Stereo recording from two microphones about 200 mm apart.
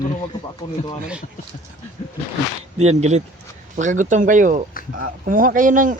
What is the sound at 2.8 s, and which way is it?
Speech, 35° right (ahead or behind).